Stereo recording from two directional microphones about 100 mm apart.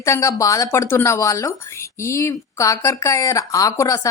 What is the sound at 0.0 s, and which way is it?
Speech, 30° left (ahead or behind).